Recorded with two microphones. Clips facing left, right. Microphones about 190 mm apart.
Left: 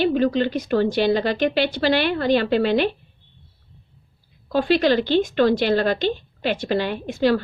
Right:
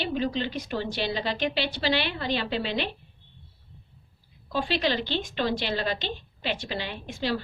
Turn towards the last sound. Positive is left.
turn(degrees=50)  # may be behind; listen again after turning